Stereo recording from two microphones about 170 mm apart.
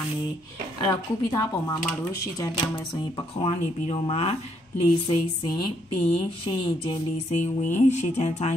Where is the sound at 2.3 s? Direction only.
20° left (ahead or behind).